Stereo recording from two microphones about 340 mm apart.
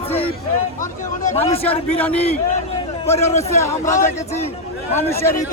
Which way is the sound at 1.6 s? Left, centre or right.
Centre.